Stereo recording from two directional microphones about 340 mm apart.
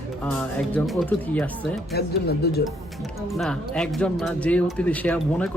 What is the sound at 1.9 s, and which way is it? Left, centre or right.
Speech, left.